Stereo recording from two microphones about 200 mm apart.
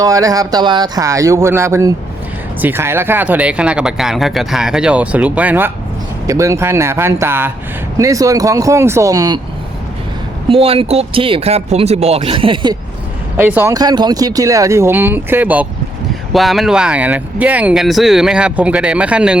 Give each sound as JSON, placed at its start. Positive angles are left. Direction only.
{"t": 0.0, "sound": "speech", "side_deg": -15}
{"t": 10.5, "sound": "speech", "side_deg": -30}
{"t": 13.3, "sound": "speech", "side_deg": -10}